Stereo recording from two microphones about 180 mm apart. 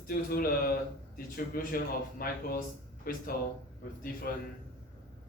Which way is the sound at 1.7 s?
55° left (ahead or behind).